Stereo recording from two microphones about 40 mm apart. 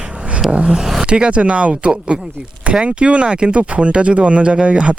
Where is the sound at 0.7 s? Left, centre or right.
Centre; by 5.0 s right.